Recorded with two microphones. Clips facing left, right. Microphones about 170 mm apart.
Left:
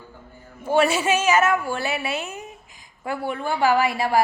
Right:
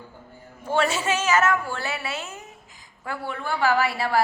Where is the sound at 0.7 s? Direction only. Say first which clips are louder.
Left 4 dB; 10° left (ahead or behind).